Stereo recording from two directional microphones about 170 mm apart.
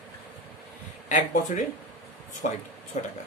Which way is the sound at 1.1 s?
45° left (ahead or behind).